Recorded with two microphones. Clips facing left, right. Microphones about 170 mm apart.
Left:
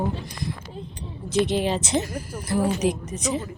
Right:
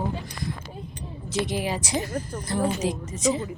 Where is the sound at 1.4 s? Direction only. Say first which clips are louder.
Left 5 dB; 25° left (ahead or behind).